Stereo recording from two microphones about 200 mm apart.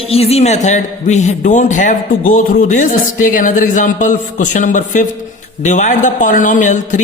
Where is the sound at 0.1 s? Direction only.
30° left (ahead or behind).